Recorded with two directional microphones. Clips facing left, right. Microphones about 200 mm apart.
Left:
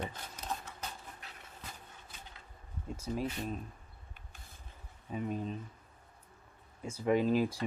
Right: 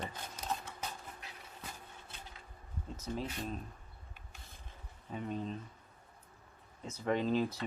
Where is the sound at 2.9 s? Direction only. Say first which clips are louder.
Left 3 dB; 10° left (ahead or behind).